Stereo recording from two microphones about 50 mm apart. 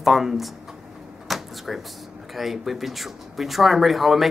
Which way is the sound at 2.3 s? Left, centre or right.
Centre.